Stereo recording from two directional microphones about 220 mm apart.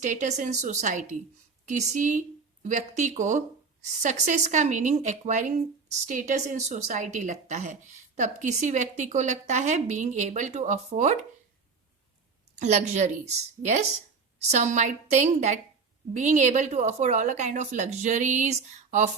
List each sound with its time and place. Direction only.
0.0 s speech: 35° right (ahead or behind)
12.5 s speech: 30° right (ahead or behind)